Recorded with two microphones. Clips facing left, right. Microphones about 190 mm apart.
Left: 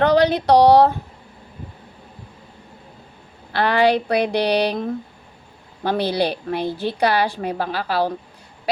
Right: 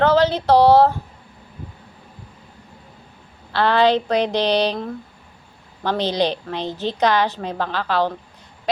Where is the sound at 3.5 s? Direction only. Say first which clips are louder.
Right 1 dB; 10° left (ahead or behind).